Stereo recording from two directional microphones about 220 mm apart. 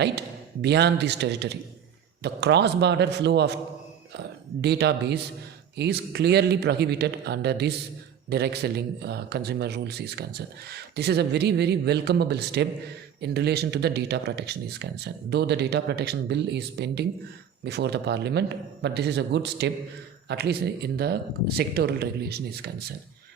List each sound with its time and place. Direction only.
0.0 s a man's voice: 50° right (ahead or behind)
4.6 s speech: 50° right (ahead or behind)